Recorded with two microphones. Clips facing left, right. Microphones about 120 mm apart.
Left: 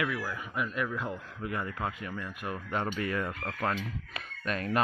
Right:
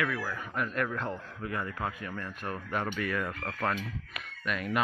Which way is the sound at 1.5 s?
20° left (ahead or behind).